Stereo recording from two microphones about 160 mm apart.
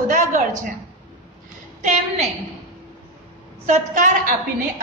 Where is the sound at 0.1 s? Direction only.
50° right (ahead or behind).